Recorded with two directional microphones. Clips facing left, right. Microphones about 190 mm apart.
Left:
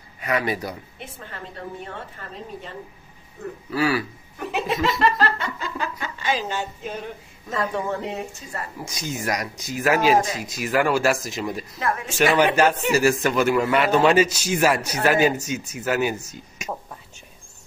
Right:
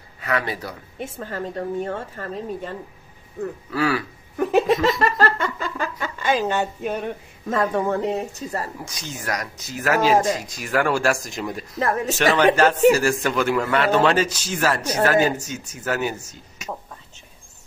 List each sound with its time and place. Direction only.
0.2 s speech: 15° left (ahead or behind)
0.9 s a woman's voice: 45° right (ahead or behind)
3.7 s a man's voice: 5° left (ahead or behind)
4.4 s a sound: 45° right (ahead or behind)
7.5 s speech: 50° right (ahead or behind)
8.8 s a man's voice: 10° left (ahead or behind)
10.1 s a woman's voice: 45° right (ahead or behind)
10.4 s a man's voice: 5° left (ahead or behind)
11.8 s speech: 40° right (ahead or behind)
12.6 s a man's voice: 10° left (ahead or behind)